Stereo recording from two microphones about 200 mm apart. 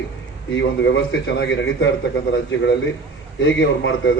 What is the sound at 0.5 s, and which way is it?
A man's voice, 60° left (ahead or behind).